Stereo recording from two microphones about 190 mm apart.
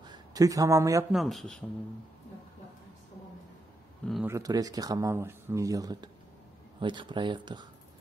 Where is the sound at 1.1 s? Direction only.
Centre (ahead or behind).